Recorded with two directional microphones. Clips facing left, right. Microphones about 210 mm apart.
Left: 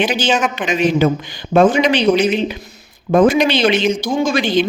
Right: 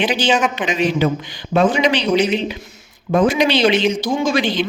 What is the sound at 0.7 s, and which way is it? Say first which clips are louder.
Speech: left 5 dB; 50° left (ahead or behind).